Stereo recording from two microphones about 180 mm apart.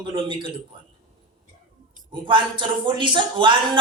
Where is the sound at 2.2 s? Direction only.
25° right (ahead or behind).